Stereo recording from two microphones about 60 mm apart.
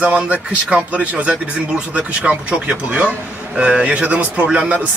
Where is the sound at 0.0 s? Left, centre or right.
Right.